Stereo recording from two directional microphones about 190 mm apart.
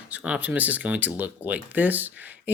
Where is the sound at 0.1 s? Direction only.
5° right (ahead or behind).